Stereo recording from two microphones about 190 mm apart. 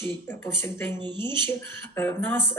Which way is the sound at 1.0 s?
25° right (ahead or behind).